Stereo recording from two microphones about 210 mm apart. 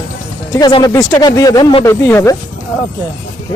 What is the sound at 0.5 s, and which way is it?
Speech, 20° left (ahead or behind).